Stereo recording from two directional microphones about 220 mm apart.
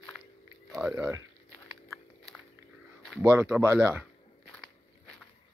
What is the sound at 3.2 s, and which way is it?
Speech, 10° right (ahead or behind).